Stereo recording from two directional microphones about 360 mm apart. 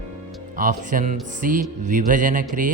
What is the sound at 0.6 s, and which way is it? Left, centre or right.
A man's voice, right.